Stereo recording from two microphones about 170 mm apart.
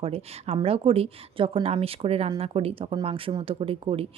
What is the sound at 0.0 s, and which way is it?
Speech, 35° right (ahead or behind).